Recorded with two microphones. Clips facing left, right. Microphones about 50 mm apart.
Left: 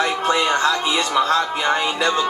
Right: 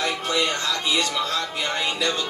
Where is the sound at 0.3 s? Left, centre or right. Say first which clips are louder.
Left 7 dB; left.